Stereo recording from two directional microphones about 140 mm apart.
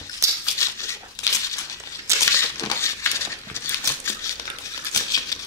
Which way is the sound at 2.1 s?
20° right (ahead or behind).